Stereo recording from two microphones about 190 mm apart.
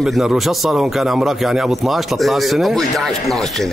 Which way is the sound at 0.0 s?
5° right (ahead or behind).